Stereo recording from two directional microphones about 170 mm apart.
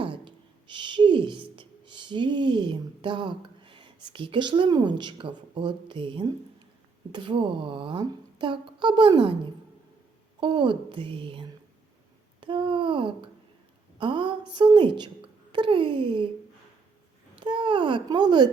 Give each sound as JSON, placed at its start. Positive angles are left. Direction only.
{"t": 0.0, "sound": "a sound", "side_deg": -30}
{"t": 7.1, "sound": "speech", "side_deg": -30}
{"t": 10.4, "sound": "speech", "side_deg": -30}
{"t": 12.4, "sound": "a sound", "side_deg": -30}
{"t": 14.0, "sound": "a woman's voice", "side_deg": -30}
{"t": 17.3, "sound": "speech", "side_deg": -30}